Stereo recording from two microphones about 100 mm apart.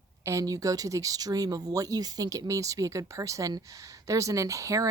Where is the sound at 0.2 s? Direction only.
30° right (ahead or behind).